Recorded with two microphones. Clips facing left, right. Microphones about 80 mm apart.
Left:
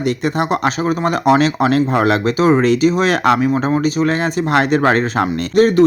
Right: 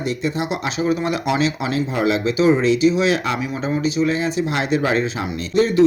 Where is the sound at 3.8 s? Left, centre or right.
Left.